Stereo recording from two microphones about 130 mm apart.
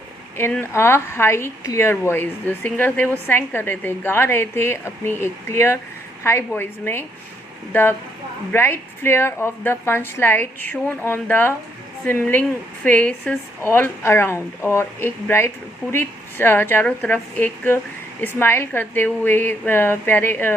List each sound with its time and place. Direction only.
0.6 s a woman's voice: 20° left (ahead or behind)